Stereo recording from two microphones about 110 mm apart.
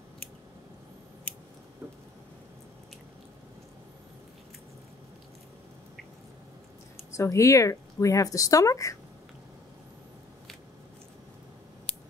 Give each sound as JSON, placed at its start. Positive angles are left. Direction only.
{"t": 7.2, "sound": "speech", "side_deg": 30}